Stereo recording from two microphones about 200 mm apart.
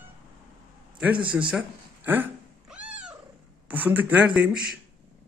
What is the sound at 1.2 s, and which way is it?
Speech, 25° right (ahead or behind).